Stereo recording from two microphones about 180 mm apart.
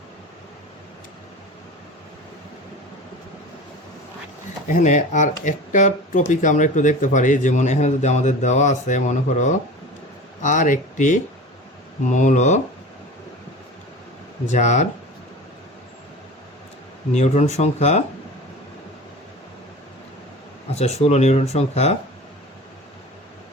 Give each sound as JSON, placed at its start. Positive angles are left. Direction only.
{"t": 4.7, "sound": "speech", "side_deg": 45}
{"t": 14.5, "sound": "speech", "side_deg": 40}
{"t": 17.1, "sound": "speech", "side_deg": 40}
{"t": 20.7, "sound": "speech", "side_deg": 35}